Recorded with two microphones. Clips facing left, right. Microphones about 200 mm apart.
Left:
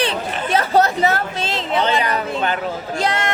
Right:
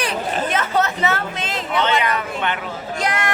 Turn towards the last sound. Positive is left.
turn(degrees=25)  # may be behind; listen again after turning